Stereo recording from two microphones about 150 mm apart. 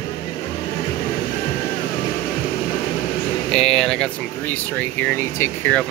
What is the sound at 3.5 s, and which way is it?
Speech, 5° left (ahead or behind).